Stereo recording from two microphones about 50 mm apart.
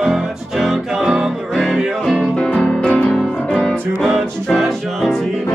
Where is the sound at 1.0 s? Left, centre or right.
Centre.